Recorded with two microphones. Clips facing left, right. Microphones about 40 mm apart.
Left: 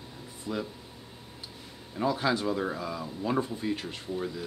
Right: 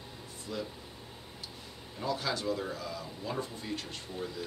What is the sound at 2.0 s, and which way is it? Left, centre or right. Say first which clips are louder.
Speech: left 6 dB; left.